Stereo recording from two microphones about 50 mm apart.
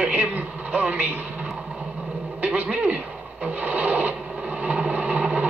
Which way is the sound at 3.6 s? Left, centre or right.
Right.